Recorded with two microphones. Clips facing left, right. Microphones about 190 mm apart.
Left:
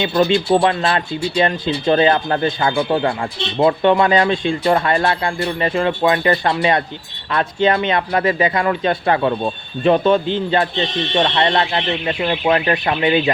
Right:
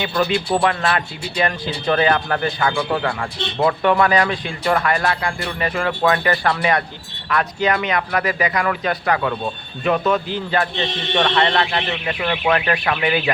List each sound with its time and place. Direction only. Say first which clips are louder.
0.0 s speech: left 4 dB; 25° left (ahead or behind)